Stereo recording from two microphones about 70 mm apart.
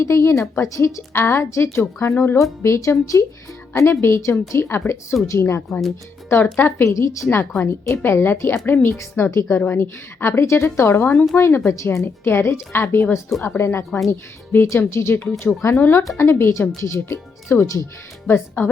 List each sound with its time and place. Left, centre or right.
0.0 s a woman's voice: left
2.6 s a woman's voice: left
6.2 s a woman's voice: left
6.9 s speech: left
7.6 s a woman's voice: left
11.9 s a woman's voice: left
18.3 s a woman's voice: left